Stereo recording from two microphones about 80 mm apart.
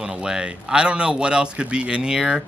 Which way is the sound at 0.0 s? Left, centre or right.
Centre.